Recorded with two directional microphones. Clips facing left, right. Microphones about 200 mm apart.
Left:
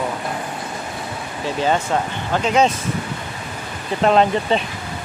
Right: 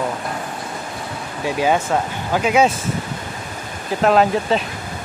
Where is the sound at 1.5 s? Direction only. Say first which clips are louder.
Right 2 dB; 10° right (ahead or behind).